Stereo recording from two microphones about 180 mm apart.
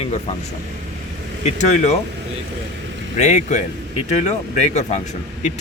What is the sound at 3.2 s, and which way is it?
Speech, 40° left (ahead or behind).